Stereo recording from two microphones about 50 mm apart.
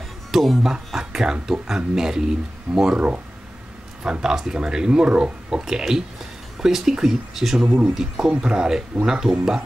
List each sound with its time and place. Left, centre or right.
0.3 s speech: centre
7.6 s speech: right